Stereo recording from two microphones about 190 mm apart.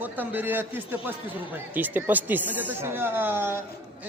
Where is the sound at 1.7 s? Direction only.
10° right (ahead or behind).